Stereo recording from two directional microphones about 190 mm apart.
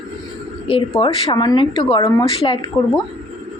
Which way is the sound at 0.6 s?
30° left (ahead or behind).